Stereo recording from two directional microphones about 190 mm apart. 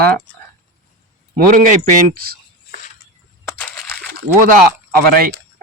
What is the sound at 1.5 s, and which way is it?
Speech, 45° right (ahead or behind).